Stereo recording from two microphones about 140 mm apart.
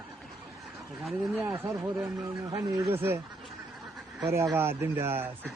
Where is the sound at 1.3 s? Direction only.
15° right (ahead or behind).